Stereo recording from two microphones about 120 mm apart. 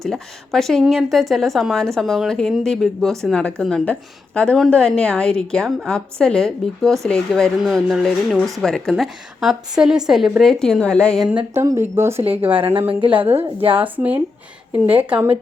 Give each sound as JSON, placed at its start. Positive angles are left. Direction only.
{"t": 0.0, "sound": "a woman's voice", "side_deg": 5}
{"t": 11.3, "sound": "a woman's voice", "side_deg": -15}
{"t": 12.9, "sound": "a woman's voice", "side_deg": -45}
{"t": 13.8, "sound": "a woman's voice", "side_deg": -15}